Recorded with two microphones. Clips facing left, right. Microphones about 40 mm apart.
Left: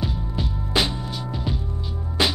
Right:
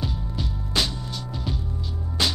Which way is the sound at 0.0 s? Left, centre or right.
Centre.